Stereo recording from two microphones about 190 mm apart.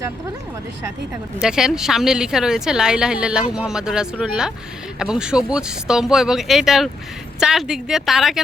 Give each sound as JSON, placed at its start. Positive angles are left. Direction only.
{"t": 1.4, "sound": "a woman's voice", "side_deg": -5}